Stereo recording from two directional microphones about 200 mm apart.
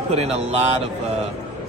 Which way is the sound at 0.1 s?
30° right (ahead or behind).